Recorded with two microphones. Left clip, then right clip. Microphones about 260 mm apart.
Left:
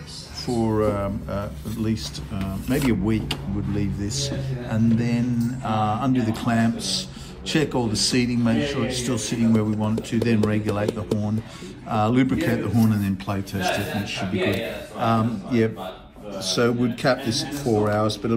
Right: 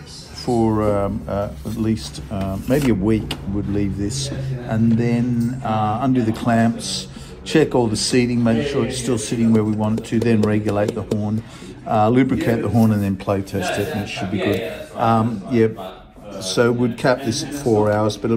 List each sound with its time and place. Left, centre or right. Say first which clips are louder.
0.7 s a man's voice: right 4 dB; centre
15.0 s speech: right 5 dB; centre